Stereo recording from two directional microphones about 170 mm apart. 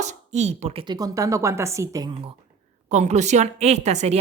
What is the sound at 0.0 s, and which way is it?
Speech, 40° right (ahead or behind).